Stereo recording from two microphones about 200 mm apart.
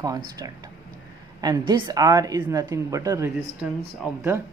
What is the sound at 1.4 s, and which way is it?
A woman's voice, 20° right (ahead or behind).